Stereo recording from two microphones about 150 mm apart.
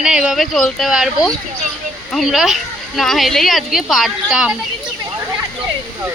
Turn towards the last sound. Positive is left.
turn(degrees=-5)  # may be behind; listen again after turning